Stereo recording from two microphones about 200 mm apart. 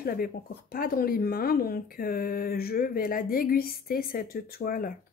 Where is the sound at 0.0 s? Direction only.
50° left (ahead or behind).